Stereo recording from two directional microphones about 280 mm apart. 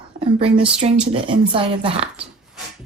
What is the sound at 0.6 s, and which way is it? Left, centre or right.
Speech, right.